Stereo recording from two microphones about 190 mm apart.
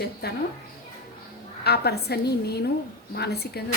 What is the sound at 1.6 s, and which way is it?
Speech, 60° left (ahead or behind).